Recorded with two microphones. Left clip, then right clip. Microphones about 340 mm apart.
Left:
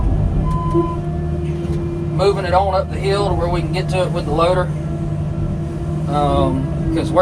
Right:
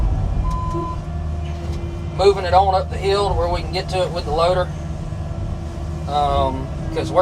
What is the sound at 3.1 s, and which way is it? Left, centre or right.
Speech, right.